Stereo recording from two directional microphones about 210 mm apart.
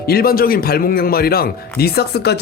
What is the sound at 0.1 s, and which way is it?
A man's voice, 45° left (ahead or behind).